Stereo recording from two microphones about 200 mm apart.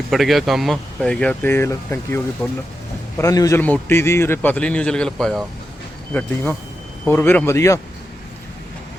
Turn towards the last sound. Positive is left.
turn(degrees=15)  # may be behind; listen again after turning